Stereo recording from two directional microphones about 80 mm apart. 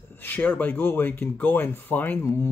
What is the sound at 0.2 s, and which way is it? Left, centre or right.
Speech, left.